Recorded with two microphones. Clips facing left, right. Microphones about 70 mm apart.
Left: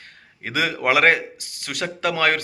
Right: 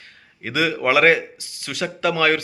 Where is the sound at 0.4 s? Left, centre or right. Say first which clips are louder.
Right 1 dB; left.